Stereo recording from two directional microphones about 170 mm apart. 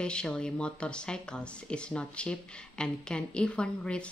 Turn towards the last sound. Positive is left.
turn(degrees=5)  # may be behind; listen again after turning